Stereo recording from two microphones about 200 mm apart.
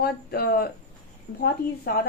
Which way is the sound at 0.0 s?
50° left (ahead or behind).